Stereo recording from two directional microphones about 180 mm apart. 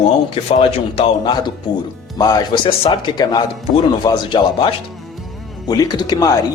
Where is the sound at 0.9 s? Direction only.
25° left (ahead or behind).